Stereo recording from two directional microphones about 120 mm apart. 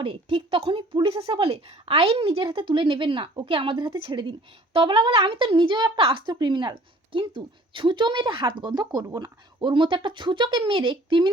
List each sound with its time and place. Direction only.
0.0 s a woman's voice: 45° right (ahead or behind)